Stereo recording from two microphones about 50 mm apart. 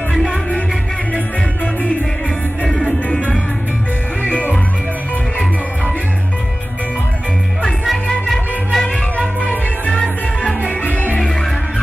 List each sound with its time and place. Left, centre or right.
8.1 s music: centre